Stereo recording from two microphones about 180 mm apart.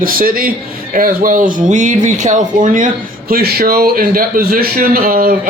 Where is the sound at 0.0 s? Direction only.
50° right (ahead or behind).